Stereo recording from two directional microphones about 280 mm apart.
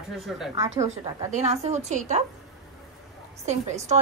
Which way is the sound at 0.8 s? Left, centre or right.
Centre.